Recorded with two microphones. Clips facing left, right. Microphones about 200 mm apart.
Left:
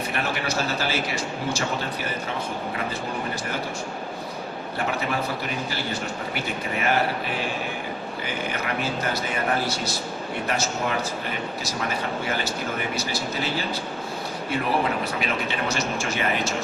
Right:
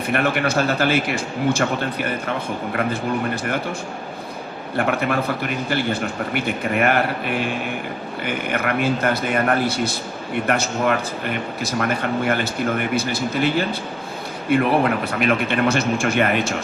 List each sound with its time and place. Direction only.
0.1 s a man's voice: 55° right (ahead or behind)
4.8 s a man's voice: 55° right (ahead or behind)